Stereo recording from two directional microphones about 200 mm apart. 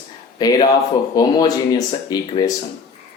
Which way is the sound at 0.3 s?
20° left (ahead or behind).